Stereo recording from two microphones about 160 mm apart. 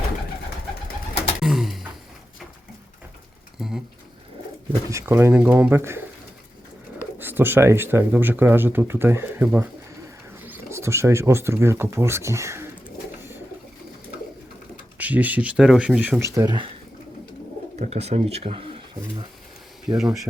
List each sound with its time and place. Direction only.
1.4 s a sound: centre (ahead or behind)
4.9 s speech: 15° right (ahead or behind)
7.2 s speech: 15° right (ahead or behind)
14.9 s speech: 10° right (ahead or behind)
17.7 s speech: 40° right (ahead or behind)
20.0 s speech: 5° right (ahead or behind)